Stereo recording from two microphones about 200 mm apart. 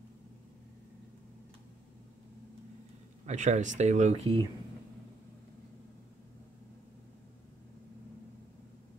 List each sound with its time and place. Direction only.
3.3 s speech: 35° right (ahead or behind)